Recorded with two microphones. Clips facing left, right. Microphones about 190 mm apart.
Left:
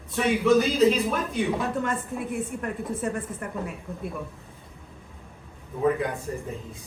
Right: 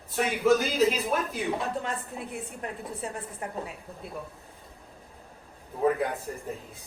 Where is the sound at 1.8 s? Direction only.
55° left (ahead or behind).